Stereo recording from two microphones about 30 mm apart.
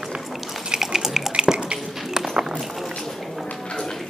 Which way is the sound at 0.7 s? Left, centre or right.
Centre.